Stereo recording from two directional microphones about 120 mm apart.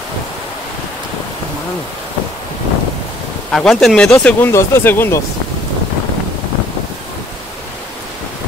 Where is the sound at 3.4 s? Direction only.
5° left (ahead or behind).